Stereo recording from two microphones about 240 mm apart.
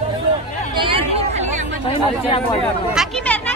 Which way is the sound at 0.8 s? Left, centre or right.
Right.